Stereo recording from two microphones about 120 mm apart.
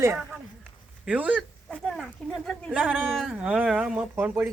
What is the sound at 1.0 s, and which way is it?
Speech, 10° right (ahead or behind).